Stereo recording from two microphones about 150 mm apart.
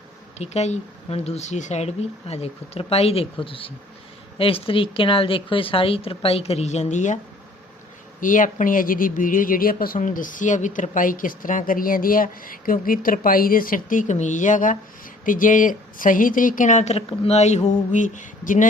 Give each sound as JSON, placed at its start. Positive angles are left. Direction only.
{"t": 0.3, "sound": "a woman's voice", "side_deg": 50}
{"t": 8.2, "sound": "speech", "side_deg": 60}